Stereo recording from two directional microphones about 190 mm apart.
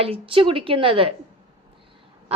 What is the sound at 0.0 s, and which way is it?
A woman's voice, 30° right (ahead or behind).